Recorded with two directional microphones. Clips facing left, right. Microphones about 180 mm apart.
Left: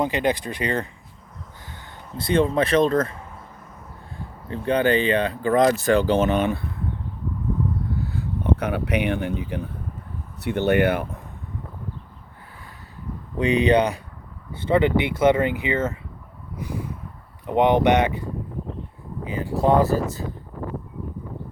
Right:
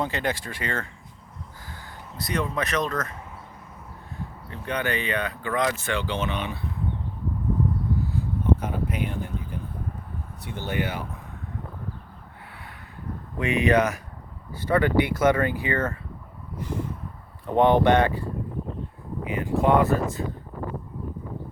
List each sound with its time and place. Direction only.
0.0 s speech: 15° left (ahead or behind)
4.4 s speech: 30° left (ahead or behind)
8.1 s speech: 75° left (ahead or behind)
13.4 s speech: 30° left (ahead or behind)
17.4 s speech: 15° left (ahead or behind)
19.2 s speech: 30° left (ahead or behind)